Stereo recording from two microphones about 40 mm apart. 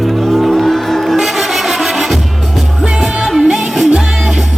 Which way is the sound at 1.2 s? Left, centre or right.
Centre.